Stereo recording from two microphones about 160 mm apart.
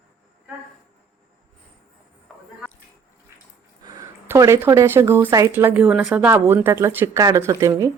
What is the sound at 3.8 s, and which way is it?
Speech, 20° right (ahead or behind).